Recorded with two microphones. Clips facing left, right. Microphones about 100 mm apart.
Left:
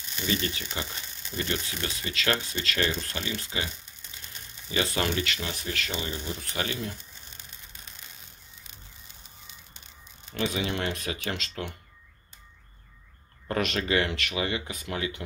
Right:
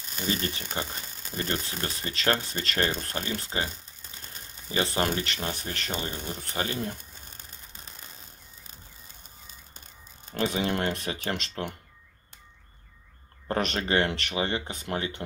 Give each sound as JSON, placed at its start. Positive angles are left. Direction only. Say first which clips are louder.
{"t": 0.0, "sound": "speech", "louder": "even", "side_deg": -40}
{"t": 8.6, "sound": "a sound", "louder": "right 2 dB", "side_deg": -45}
{"t": 10.3, "sound": "speech", "louder": "right 2 dB", "side_deg": -40}
{"t": 13.5, "sound": "speech", "louder": "even", "side_deg": -35}